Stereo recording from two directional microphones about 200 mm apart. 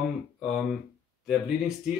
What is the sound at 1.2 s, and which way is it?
Speech, centre (ahead or behind).